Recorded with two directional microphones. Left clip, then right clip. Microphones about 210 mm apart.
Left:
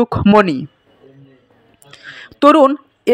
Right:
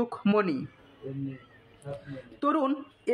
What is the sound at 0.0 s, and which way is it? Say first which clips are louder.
Speech: left 15 dB; 30° left (ahead or behind).